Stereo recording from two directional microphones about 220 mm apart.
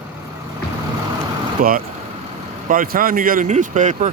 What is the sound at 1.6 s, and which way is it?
Speech, 40° right (ahead or behind).